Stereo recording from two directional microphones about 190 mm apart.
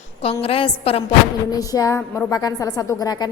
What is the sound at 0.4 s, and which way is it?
Speech, 30° left (ahead or behind).